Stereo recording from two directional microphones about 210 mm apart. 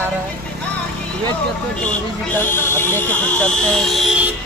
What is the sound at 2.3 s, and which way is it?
Speech, 10° left (ahead or behind).